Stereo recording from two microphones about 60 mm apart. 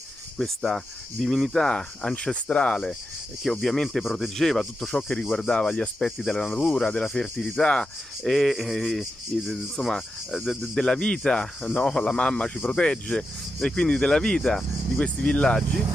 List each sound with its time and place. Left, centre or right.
0.4 s speech: centre
3.6 s speech: centre
4.0 s cricket: centre
4.9 s speech: centre
8.2 s cricket: centre
10.7 s speech: centre